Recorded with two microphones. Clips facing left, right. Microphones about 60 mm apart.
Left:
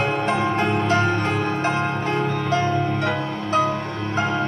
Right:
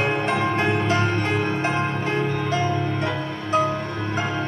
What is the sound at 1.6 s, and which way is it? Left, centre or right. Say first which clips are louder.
Music: left 1 dB; centre.